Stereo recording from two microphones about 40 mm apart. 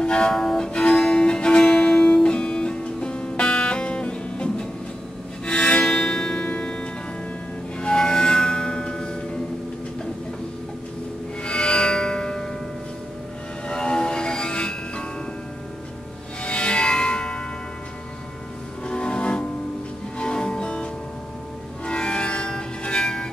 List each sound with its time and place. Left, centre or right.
0.0 s music: left
0.7 s music: left
7.8 s music: centre
11.4 s music: left
13.7 s music: left
16.4 s music: left
18.9 s music: left